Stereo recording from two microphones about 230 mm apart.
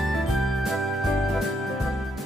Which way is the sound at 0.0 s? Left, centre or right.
Centre.